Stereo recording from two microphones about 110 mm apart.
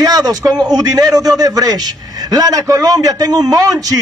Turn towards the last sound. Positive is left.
turn(degrees=-35)  # may be behind; listen again after turning